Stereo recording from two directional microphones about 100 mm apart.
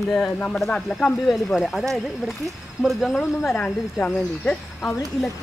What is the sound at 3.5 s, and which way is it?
Speech, 15° left (ahead or behind).